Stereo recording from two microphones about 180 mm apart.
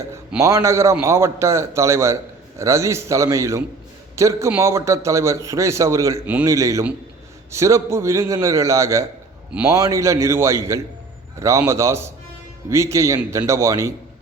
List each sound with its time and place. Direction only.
0.3 s a man's voice: 15° right (ahead or behind)